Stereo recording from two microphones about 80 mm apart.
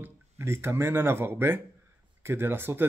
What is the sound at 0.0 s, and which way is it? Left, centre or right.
Speech, right.